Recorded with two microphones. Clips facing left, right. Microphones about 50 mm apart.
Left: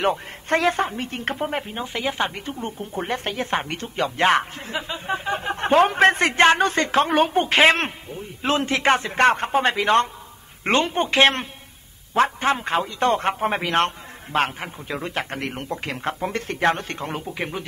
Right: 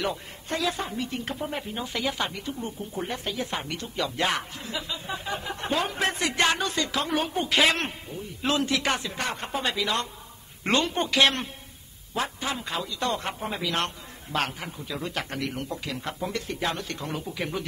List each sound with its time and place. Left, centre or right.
0.0 s speech: left
1.7 s speech: left
2.3 s a man's voice: left
9.1 s a man's voice: left
12.1 s speech: left
13.4 s a man's voice: left